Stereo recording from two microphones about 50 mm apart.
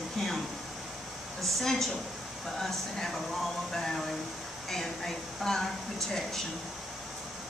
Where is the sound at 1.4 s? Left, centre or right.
Centre.